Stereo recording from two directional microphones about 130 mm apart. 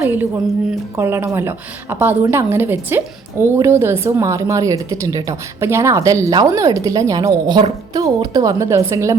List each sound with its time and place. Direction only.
0.0 s a woman's voice: 15° right (ahead or behind)